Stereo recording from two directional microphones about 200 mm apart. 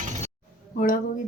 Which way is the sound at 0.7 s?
40° left (ahead or behind).